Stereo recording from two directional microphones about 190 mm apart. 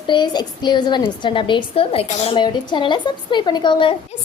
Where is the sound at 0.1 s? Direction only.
25° left (ahead or behind).